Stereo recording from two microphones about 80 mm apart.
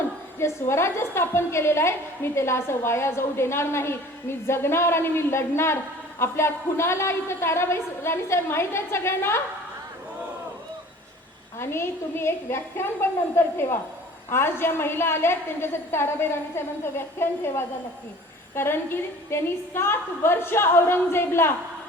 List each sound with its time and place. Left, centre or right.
0.3 s a woman's voice: left
11.6 s a woman's voice: left